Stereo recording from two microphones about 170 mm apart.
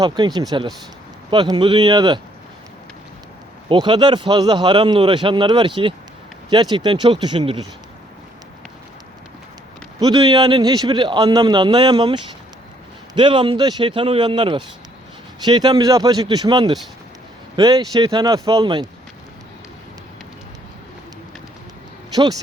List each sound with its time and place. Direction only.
0.0 s a man's voice: 25° right (ahead or behind)
3.7 s a man's voice: 25° right (ahead or behind)
10.0 s a man's voice: 25° right (ahead or behind)
22.1 s speech: 25° right (ahead or behind)